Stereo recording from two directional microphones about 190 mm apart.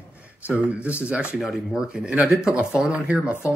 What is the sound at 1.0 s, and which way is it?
Speech, 5° right (ahead or behind).